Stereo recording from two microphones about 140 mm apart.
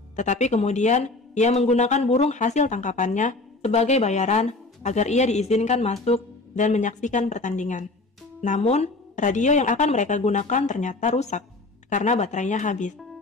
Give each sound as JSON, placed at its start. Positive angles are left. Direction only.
{"t": 0.1, "sound": "speech", "side_deg": 55}